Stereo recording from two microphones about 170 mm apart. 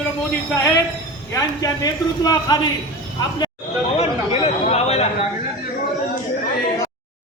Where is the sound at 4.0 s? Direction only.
35° left (ahead or behind).